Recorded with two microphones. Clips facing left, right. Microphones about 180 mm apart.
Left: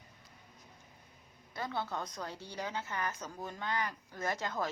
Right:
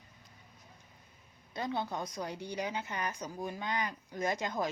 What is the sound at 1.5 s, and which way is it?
A woman's voice, 20° right (ahead or behind).